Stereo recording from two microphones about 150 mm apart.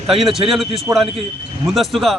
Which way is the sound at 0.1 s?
Centre (ahead or behind).